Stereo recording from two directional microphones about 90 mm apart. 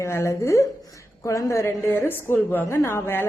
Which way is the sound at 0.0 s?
30° left (ahead or behind).